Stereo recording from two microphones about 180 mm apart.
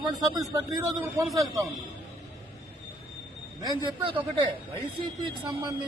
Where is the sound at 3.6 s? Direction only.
30° right (ahead or behind).